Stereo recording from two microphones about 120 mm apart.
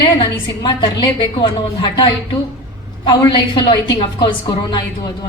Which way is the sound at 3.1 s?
40° left (ahead or behind).